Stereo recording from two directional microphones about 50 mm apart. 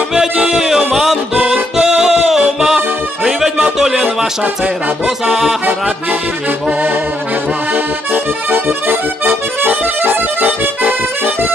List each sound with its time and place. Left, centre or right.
0.5 s music: centre
5.0 s music: centre
7.7 s accordion: right